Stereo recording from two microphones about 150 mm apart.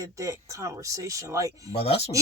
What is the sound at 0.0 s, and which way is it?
Speech, 20° right (ahead or behind).